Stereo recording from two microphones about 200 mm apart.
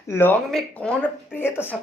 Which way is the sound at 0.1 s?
10° left (ahead or behind).